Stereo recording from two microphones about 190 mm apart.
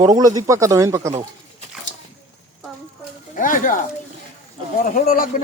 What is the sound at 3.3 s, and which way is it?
Speech, 45° left (ahead or behind).